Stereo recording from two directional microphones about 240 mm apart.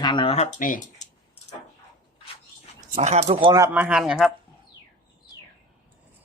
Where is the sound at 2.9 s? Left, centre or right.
Right; by 4.3 s centre.